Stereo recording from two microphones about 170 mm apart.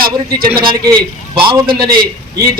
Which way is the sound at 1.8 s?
60° right (ahead or behind).